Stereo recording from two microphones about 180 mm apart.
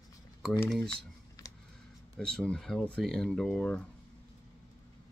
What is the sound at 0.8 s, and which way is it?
Typing, 20° left (ahead or behind).